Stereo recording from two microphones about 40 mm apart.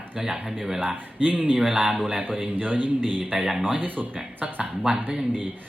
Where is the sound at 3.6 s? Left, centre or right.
Right.